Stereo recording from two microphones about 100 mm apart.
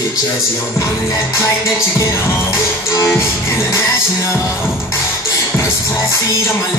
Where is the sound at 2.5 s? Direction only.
30° left (ahead or behind).